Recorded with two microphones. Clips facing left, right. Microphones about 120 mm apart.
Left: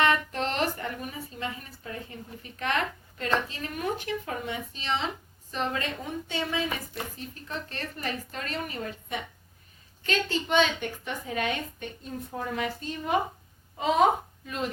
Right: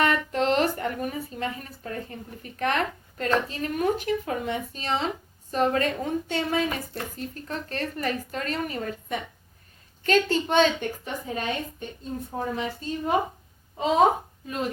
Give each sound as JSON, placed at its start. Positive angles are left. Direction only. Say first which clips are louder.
{"t": 0.0, "sound": "a woman's voice", "louder": "right 2 dB", "side_deg": -35}
{"t": 14.4, "sound": "speech", "louder": "right 3 dB", "side_deg": -35}